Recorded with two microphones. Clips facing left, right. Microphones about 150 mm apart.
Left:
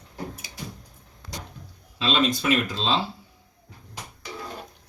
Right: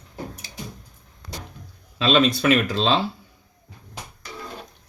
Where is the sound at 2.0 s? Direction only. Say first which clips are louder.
Right 5 dB; 75° right (ahead or behind).